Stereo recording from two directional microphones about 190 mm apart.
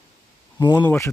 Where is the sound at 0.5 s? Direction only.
25° left (ahead or behind).